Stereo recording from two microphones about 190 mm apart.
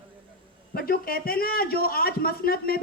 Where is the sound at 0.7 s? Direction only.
50° left (ahead or behind).